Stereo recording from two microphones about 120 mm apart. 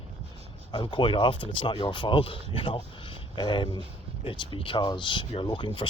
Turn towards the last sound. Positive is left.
turn(degrees=40)  # may be behind; listen again after turning